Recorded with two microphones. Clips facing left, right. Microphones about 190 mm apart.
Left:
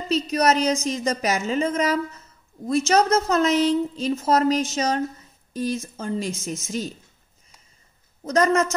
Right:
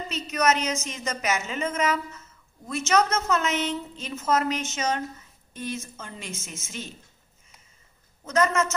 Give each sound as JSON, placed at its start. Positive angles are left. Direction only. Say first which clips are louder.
{"t": 0.1, "sound": "a woman's voice", "louder": "left 5 dB", "side_deg": 35}
{"t": 8.2, "sound": "a woman's voice", "louder": "left 4 dB", "side_deg": 35}